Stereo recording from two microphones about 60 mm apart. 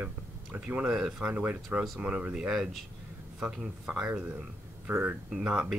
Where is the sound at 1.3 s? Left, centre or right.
Right.